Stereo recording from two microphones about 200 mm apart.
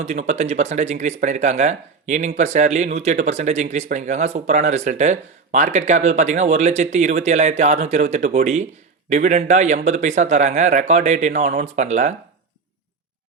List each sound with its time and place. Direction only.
0.0 s speech: 35° right (ahead or behind)